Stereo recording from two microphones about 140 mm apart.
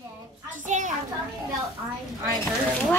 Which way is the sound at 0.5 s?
60° right (ahead or behind).